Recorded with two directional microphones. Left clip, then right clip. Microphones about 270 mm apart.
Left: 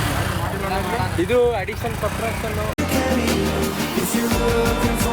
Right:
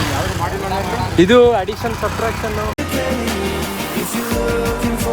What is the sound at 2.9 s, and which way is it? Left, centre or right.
Music, centre.